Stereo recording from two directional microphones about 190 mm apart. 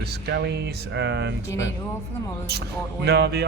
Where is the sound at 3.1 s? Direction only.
60° right (ahead or behind).